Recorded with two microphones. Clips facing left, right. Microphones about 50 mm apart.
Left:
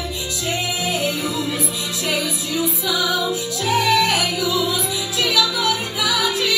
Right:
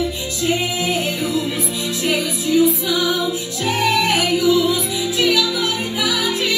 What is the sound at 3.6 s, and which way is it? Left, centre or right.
Music, centre.